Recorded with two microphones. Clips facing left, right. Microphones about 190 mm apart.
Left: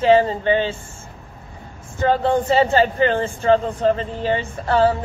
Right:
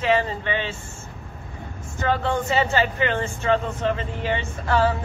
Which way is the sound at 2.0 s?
35° left (ahead or behind).